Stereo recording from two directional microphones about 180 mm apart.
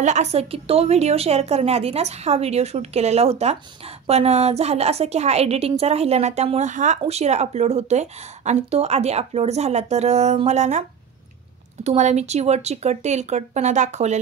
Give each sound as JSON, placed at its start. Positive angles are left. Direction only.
{"t": 0.0, "sound": "a woman's voice", "side_deg": -40}